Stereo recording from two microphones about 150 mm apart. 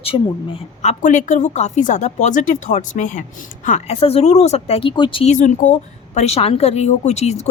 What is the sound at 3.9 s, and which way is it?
Speech, 40° left (ahead or behind).